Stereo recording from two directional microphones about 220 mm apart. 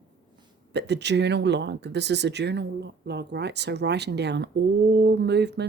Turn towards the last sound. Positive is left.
turn(degrees=-50)  # may be behind; listen again after turning